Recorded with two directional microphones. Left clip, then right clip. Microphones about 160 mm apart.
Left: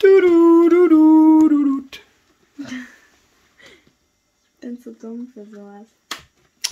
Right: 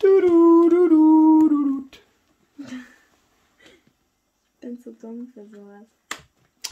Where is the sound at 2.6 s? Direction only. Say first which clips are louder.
Left 6 dB; 40° left (ahead or behind).